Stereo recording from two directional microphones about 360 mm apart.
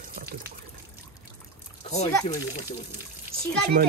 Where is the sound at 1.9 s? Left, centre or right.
Centre.